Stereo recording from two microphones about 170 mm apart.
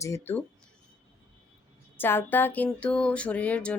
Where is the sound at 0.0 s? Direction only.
15° left (ahead or behind).